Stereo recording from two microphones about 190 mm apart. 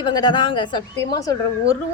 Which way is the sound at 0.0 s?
20° left (ahead or behind).